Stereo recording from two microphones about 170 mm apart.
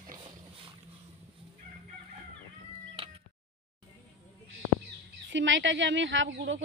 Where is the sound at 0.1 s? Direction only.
25° right (ahead or behind).